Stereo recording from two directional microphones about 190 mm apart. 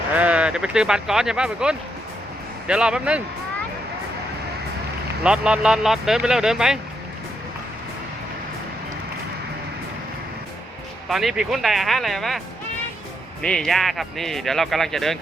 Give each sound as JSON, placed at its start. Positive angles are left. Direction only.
{"t": 0.1, "sound": "speech", "side_deg": -5}
{"t": 5.2, "sound": "speech", "side_deg": -5}
{"t": 11.1, "sound": "speech", "side_deg": 0}
{"t": 13.4, "sound": "speech", "side_deg": 5}